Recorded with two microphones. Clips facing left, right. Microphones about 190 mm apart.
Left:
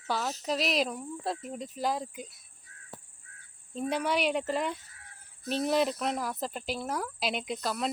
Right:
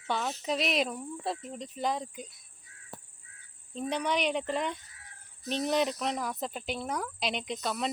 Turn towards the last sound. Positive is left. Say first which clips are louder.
# left 1 dB
turn(degrees=0)  # may be behind; listen again after turning